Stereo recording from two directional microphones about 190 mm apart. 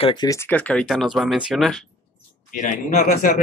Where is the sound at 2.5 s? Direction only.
40° left (ahead or behind).